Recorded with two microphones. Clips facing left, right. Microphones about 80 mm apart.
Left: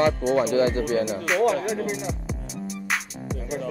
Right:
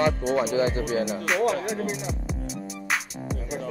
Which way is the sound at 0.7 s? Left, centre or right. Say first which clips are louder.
Left 3 dB; left.